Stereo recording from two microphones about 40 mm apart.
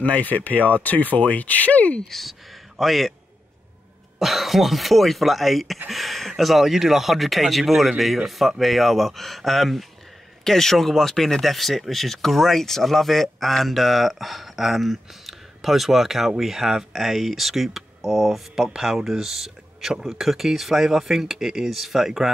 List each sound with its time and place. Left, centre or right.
0.0 s speech: left
2.0 s speech: centre
4.2 s speech: centre
18.7 s speech: centre